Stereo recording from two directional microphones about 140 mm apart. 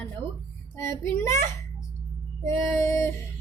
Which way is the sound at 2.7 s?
20° left (ahead or behind).